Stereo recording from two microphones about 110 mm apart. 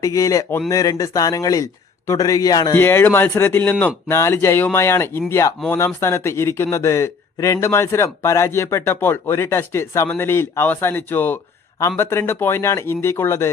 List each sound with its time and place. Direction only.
0.0 s speech: 30° left (ahead or behind)
2.7 s a man's voice: 20° left (ahead or behind)